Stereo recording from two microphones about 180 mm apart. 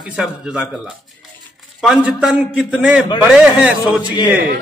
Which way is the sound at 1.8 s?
Centre (ahead or behind).